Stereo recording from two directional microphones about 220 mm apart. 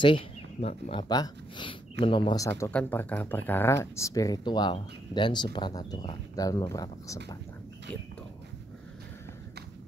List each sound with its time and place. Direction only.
0.0 s speech: 25° left (ahead or behind)